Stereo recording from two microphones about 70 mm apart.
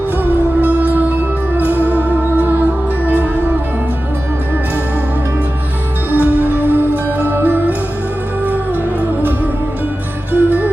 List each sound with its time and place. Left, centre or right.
0.6 s music: right
6.1 s music: right
9.0 s music: right